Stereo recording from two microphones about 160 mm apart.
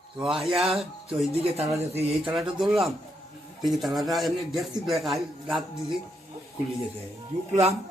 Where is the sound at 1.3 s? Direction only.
40° right (ahead or behind).